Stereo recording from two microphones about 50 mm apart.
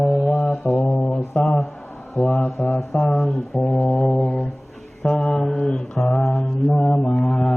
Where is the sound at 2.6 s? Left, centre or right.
Centre.